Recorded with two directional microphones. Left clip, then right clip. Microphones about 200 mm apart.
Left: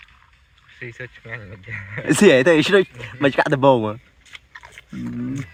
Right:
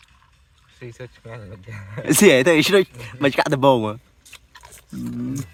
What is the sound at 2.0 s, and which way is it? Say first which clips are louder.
Speech: even; centre (ahead or behind).